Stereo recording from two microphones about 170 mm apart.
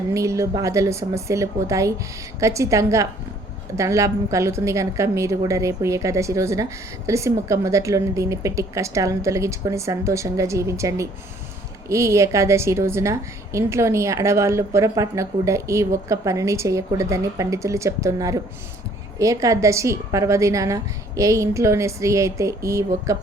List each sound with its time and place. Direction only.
0.1 s a woman's voice: 20° right (ahead or behind)